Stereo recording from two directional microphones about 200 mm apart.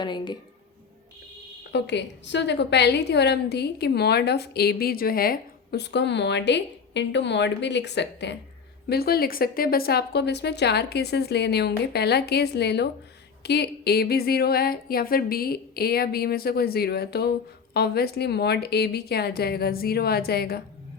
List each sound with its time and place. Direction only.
0.0 s a woman's voice: 20° left (ahead or behind)
1.7 s a woman's voice: 60° left (ahead or behind)